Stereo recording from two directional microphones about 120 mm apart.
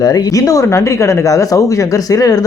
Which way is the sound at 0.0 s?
30° left (ahead or behind).